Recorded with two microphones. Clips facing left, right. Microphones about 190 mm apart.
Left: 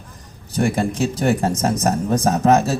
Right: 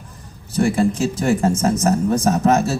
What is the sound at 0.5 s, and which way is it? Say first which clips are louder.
Speech: right 2 dB; 35° right (ahead or behind).